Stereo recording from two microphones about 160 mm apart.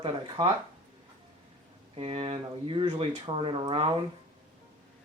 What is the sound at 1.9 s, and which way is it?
Speech, 35° right (ahead or behind).